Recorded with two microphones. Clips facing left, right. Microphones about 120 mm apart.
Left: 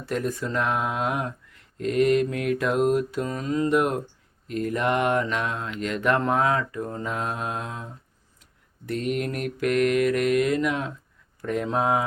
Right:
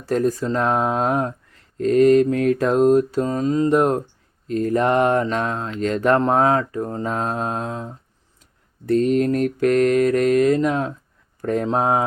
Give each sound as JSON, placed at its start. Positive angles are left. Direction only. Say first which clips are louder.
{"t": 0.0, "sound": "speech", "louder": "right 7 dB", "side_deg": -35}
{"t": 8.9, "sound": "speech", "louder": "right 10 dB", "side_deg": -35}